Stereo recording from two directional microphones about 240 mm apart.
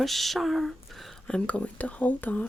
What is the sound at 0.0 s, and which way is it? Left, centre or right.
Speech, centre.